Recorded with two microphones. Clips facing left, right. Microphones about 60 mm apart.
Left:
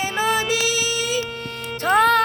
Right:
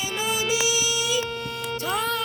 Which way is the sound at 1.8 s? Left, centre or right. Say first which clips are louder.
Left 11 dB; left.